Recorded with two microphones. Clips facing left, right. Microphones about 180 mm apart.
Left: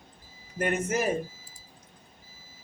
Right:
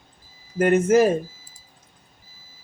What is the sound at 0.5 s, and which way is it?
Speech, 90° right.